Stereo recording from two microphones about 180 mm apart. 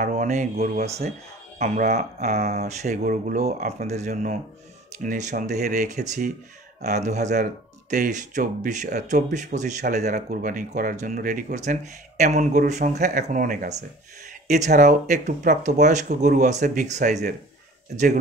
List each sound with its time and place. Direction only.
0.0 s speech: 40° right (ahead or behind)